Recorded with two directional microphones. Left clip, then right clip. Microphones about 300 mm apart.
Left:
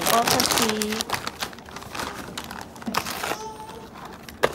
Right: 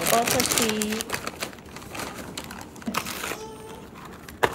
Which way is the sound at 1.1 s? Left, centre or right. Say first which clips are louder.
Left 2 dB; centre.